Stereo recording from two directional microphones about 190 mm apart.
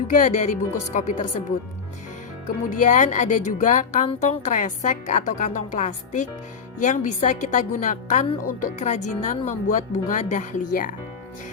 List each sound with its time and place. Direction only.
0.1 s a woman's voice: 40° left (ahead or behind)
2.6 s a woman's voice: 40° left (ahead or behind)